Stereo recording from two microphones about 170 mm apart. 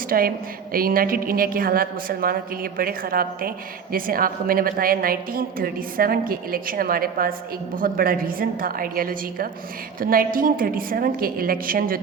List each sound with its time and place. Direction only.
0.1 s a woman's voice: 60° right (ahead or behind)